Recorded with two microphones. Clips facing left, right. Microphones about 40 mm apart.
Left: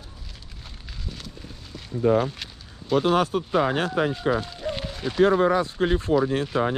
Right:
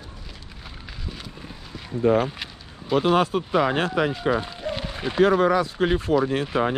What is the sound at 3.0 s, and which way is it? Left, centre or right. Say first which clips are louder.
Speech: right 1 dB; right.